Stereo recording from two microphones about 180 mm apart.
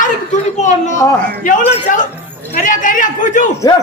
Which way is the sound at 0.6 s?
40° left (ahead or behind).